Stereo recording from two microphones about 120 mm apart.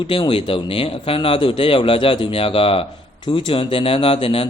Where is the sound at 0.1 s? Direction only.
50° left (ahead or behind).